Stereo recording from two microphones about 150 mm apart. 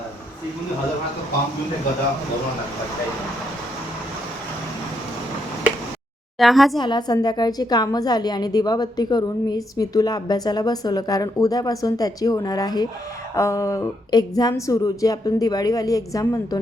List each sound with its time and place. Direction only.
6.4 s a woman's voice: centre (ahead or behind)
6.7 s speech: 30° left (ahead or behind)